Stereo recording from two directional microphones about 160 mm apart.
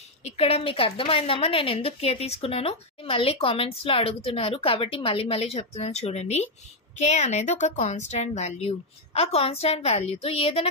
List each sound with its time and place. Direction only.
0.2 s a woman's voice: 40° left (ahead or behind)